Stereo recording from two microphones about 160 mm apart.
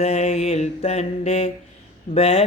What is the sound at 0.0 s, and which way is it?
Mantra, 40° left (ahead or behind).